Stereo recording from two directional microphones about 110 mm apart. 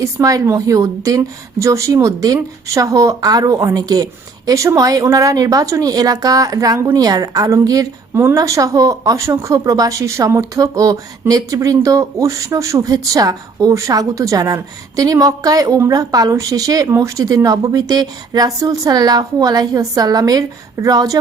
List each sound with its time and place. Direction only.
0.0 s speech: 30° right (ahead or behind)